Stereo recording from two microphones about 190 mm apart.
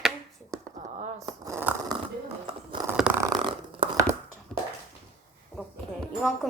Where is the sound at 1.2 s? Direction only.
15° right (ahead or behind).